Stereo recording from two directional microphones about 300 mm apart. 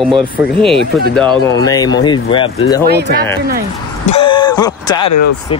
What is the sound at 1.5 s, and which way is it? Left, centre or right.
Speech, centre.